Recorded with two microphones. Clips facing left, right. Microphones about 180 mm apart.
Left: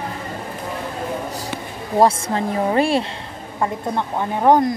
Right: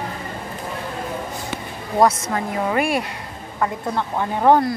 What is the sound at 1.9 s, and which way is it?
A woman's voice, 30° left (ahead or behind).